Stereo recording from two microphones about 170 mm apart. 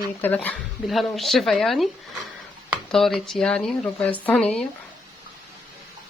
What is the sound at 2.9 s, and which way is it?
Speech, centre (ahead or behind).